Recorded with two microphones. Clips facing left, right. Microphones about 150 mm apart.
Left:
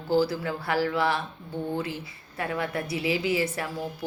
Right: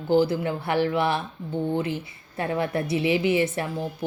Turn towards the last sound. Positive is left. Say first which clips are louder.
# right 4 dB
turn(degrees=-25)  # may be behind; listen again after turning